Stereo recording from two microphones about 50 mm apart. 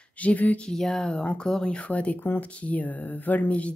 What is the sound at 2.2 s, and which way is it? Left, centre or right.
Speech, left.